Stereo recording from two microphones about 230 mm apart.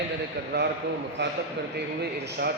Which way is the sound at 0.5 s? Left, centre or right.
Right.